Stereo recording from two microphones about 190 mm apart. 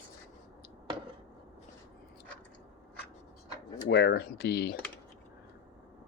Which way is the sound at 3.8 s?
60° left (ahead or behind).